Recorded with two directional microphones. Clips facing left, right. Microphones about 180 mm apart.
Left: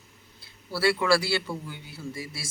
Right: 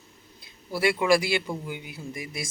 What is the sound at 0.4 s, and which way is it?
Speech, 15° right (ahead or behind).